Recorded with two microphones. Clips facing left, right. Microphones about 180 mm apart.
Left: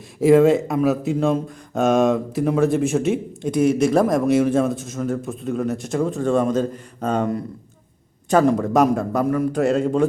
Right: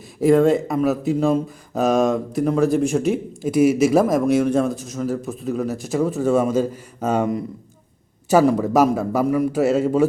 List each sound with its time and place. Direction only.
0.2 s speech: centre (ahead or behind)